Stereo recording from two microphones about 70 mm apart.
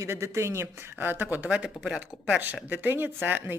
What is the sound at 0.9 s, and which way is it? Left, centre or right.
Speech, right.